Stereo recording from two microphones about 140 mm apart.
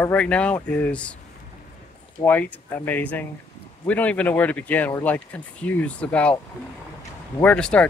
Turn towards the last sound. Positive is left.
turn(degrees=5)  # may be behind; listen again after turning